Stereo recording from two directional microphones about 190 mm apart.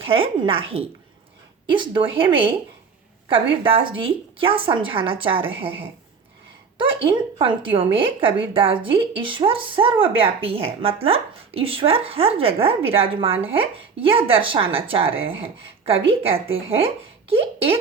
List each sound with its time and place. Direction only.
0.0 s a woman's voice: 30° right (ahead or behind)
1.7 s a woman's voice: 25° right (ahead or behind)
16.0 s a woman's voice: 30° right (ahead or behind)